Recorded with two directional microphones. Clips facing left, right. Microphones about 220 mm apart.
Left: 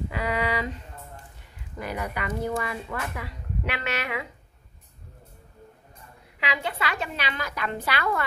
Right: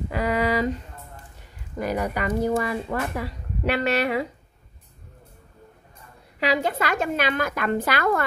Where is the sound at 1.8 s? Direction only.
40° right (ahead or behind).